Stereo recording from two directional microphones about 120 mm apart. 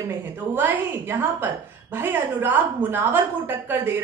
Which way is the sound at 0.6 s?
15° right (ahead or behind).